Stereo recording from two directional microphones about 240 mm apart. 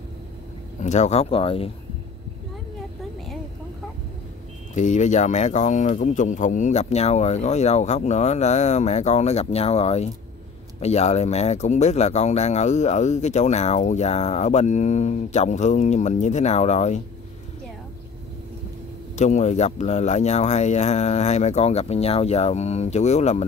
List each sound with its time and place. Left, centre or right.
0.7 s speech: left
4.7 s speech: left
19.1 s speech: left